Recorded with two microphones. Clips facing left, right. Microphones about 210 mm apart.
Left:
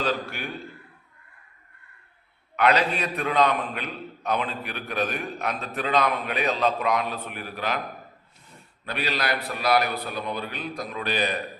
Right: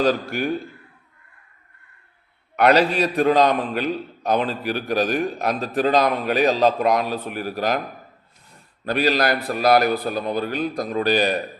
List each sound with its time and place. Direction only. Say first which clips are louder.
0.0 s a man's voice: right 8 dB; 40° right (ahead or behind)
2.6 s a man's voice: right 6 dB; 40° right (ahead or behind)
8.8 s a man's voice: right 9 dB; 40° right (ahead or behind)